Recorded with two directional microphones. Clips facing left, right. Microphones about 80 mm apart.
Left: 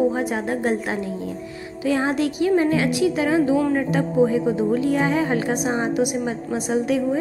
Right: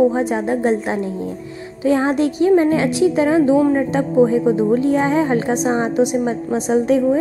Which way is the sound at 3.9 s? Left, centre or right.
Right.